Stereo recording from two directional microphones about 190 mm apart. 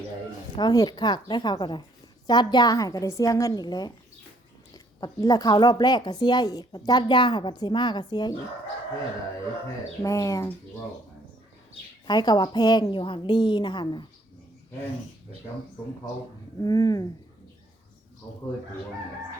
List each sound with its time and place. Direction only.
0.5 s speech: 20° left (ahead or behind)
10.0 s speech: 15° left (ahead or behind)
12.0 s speech: 20° left (ahead or behind)
16.6 s speech: 20° left (ahead or behind)